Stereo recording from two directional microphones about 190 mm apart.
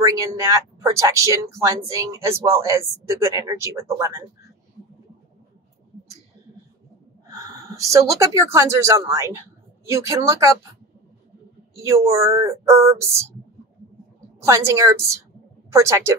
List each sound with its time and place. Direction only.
0.0 s speech: 15° right (ahead or behind)
7.3 s a sound: 15° right (ahead or behind)
8.4 s speech: 15° right (ahead or behind)
11.7 s speech: 15° right (ahead or behind)
14.4 s speech: 15° right (ahead or behind)